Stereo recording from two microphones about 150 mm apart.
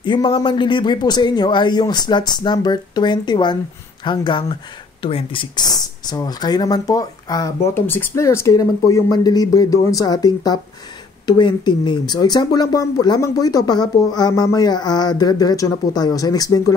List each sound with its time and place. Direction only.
0.0 s speech: 30° left (ahead or behind)
7.7 s speech: 15° left (ahead or behind)